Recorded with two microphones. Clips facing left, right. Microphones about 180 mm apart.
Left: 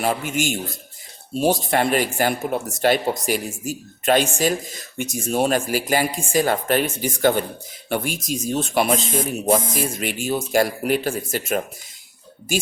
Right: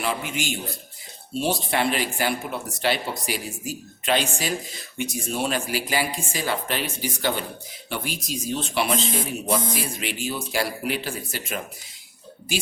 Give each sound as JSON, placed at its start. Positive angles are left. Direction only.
{"t": 0.0, "sound": "speech", "side_deg": 45}